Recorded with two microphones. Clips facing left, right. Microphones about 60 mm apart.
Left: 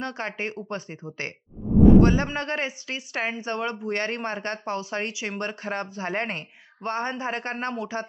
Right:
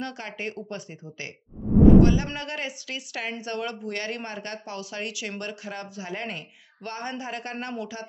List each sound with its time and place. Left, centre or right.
0.0 s a man's voice: left
6.8 s speech: left